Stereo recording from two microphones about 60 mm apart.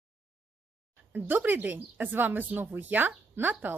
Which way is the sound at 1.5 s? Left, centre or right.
Right.